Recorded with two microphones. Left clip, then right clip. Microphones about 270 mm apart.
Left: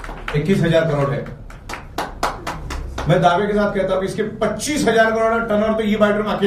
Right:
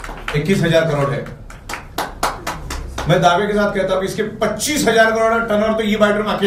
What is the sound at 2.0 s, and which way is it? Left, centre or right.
Clapping, centre.